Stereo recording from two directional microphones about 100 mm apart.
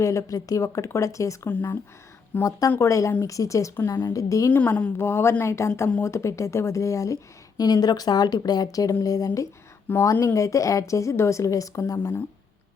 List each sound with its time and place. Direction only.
0.0 s speech: 30° left (ahead or behind)
1.5 s a woman's voice: 20° left (ahead or behind)
2.4 s speech: 35° left (ahead or behind)
4.5 s a woman's voice: 20° left (ahead or behind)